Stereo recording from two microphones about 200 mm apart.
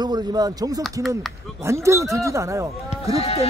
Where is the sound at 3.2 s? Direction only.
30° left (ahead or behind).